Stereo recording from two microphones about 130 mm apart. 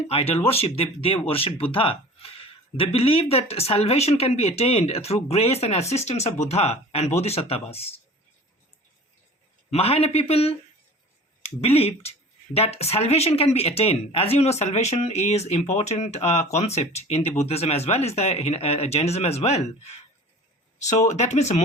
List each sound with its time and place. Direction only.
0.1 s speech: 50° left (ahead or behind)
9.6 s speech: 50° left (ahead or behind)